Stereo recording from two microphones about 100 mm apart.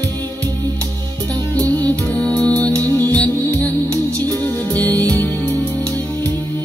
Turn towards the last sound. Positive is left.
turn(degrees=-35)  # may be behind; listen again after turning